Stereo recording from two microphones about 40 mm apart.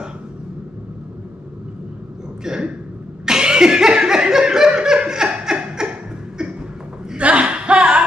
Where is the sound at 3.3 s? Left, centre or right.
Centre.